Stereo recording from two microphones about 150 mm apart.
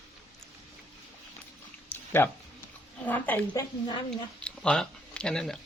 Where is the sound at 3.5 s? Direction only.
30° left (ahead or behind).